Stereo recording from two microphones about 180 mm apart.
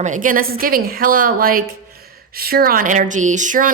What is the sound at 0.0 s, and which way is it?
Speech, 45° right (ahead or behind).